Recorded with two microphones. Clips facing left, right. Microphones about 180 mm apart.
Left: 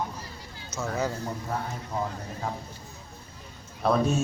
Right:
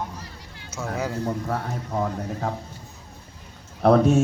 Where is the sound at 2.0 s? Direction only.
60° right (ahead or behind).